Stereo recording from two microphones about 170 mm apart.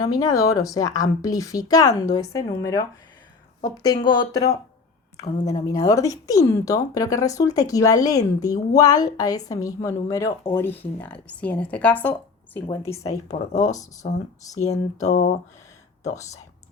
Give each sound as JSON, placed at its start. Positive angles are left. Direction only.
{"t": 0.0, "sound": "a woman's voice", "side_deg": 20}
{"t": 13.2, "sound": "speech", "side_deg": 45}
{"t": 15.1, "sound": "speech", "side_deg": 65}